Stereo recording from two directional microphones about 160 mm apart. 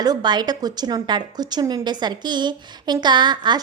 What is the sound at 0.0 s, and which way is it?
A woman's voice, 25° right (ahead or behind).